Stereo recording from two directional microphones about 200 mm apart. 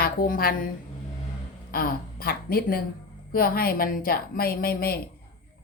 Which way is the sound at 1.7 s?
45° left (ahead or behind).